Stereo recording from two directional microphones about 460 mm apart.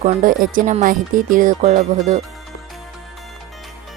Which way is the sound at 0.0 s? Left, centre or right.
Centre.